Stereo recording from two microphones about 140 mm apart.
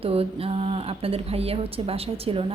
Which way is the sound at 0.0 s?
45° right (ahead or behind).